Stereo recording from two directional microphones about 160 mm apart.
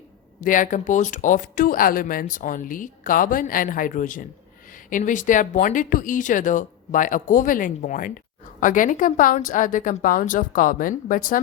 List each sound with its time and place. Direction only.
0.4 s speech: 55° left (ahead or behind)